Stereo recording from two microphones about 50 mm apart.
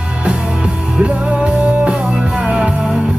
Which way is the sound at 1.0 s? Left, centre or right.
Right.